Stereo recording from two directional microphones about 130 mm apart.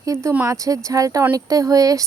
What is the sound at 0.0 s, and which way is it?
Speech, 25° right (ahead or behind).